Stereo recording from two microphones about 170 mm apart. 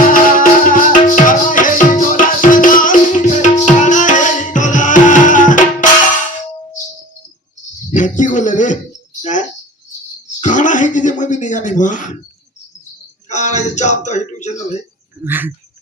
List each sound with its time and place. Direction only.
0.0 s music: 55° left (ahead or behind)
7.9 s a sound: 45° left (ahead or behind)
10.4 s speech: 45° left (ahead or behind)
13.2 s speech: 45° left (ahead or behind)
15.2 s speech: 10° right (ahead or behind)